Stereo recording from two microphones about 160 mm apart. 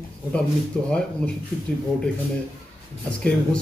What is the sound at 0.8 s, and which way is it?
Speech, 5° left (ahead or behind).